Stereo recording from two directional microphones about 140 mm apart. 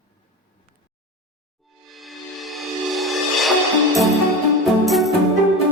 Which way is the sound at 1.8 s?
Centre (ahead or behind).